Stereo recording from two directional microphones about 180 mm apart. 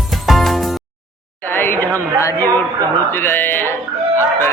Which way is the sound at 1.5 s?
10° left (ahead or behind).